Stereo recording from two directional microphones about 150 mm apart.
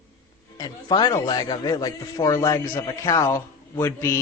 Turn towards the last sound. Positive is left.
turn(degrees=15)  # may be behind; listen again after turning